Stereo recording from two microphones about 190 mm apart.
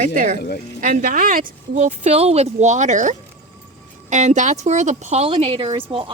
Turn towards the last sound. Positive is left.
turn(degrees=-30)  # may be behind; listen again after turning